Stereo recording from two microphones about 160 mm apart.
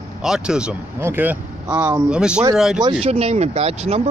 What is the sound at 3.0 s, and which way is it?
Speech, 40° right (ahead or behind).